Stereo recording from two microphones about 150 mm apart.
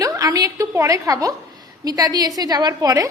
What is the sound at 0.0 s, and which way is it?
A woman's voice, 25° right (ahead or behind).